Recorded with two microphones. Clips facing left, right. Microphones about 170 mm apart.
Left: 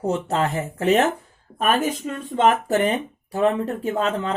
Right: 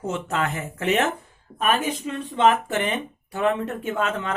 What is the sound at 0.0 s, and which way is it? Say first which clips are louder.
Speech: left 4 dB; 35° left (ahead or behind).